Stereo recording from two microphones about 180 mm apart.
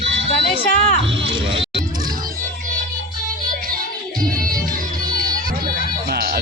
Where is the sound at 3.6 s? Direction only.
50° right (ahead or behind).